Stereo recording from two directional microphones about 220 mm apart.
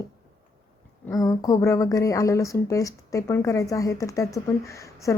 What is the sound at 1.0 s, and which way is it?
A woman's voice, 15° left (ahead or behind).